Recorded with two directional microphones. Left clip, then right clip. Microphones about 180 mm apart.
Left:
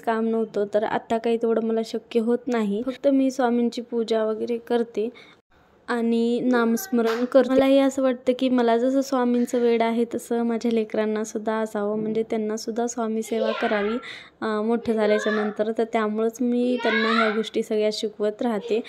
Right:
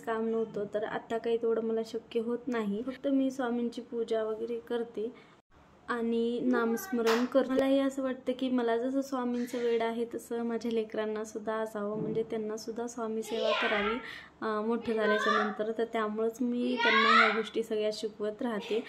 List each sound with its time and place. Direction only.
0.0 s a woman's voice: 40° left (ahead or behind)
14.4 s a woman's voice: 35° left (ahead or behind)